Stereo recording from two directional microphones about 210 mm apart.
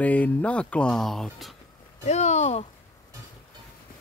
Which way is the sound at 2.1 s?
30° left (ahead or behind).